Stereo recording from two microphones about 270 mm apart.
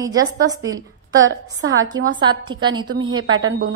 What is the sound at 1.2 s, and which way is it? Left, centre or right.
Speech, right.